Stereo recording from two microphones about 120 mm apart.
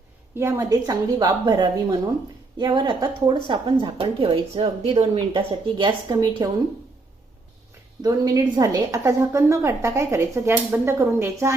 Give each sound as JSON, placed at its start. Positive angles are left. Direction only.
{"t": 0.3, "sound": "a woman's voice", "side_deg": -20}
{"t": 0.7, "sound": "a woman's voice", "side_deg": -35}
{"t": 5.7, "sound": "a woman's voice", "side_deg": -40}
{"t": 6.1, "sound": "a woman's voice", "side_deg": -30}
{"t": 8.0, "sound": "a woman's voice", "side_deg": -30}